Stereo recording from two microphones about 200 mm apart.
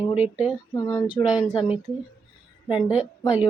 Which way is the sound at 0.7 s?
20° left (ahead or behind).